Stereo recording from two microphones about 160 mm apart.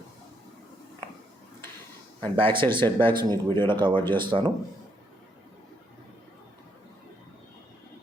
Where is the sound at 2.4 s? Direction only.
30° right (ahead or behind).